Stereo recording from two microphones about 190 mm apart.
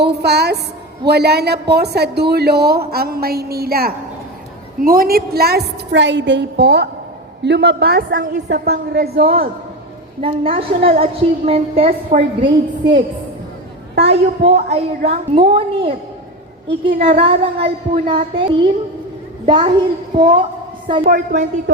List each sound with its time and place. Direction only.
0.0 s a woman's voice: 60° right (ahead or behind)
8.4 s a woman's voice: 60° right (ahead or behind)
10.2 s a woman's voice: 30° right (ahead or behind)
14.0 s a woman's voice: 30° right (ahead or behind)
21.0 s a woman's voice: 50° right (ahead or behind)